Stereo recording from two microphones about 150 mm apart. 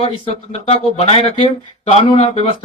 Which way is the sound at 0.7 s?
40° left (ahead or behind).